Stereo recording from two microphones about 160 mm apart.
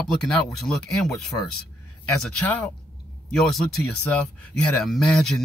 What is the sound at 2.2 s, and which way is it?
Speech, 10° left (ahead or behind).